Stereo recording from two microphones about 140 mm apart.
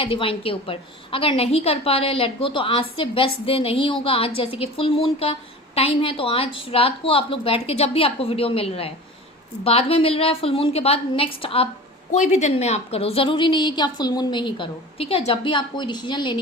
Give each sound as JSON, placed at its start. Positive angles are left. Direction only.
{"t": 0.0, "sound": "a woman's voice", "side_deg": 40}
{"t": 12.1, "sound": "a woman's voice", "side_deg": 55}